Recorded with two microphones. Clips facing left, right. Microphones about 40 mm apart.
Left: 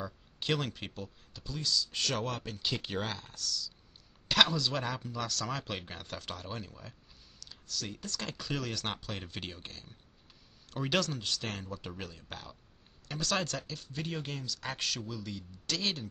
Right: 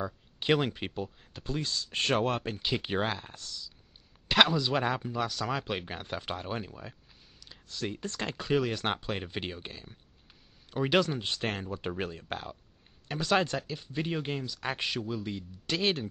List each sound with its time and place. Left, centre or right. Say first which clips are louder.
0.0 s speech: right 5 dB; right
1.3 s speech: even; right
2.6 s speech: right 3 dB; right
13.1 s speech: right 6 dB; right